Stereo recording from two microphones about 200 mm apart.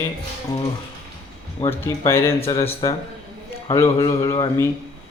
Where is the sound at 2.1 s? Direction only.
15° left (ahead or behind).